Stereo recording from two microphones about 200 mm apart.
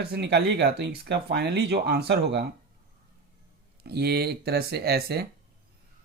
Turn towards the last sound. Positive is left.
turn(degrees=-50)  # may be behind; listen again after turning